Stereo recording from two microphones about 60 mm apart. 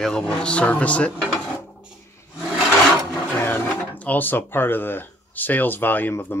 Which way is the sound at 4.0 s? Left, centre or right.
Left.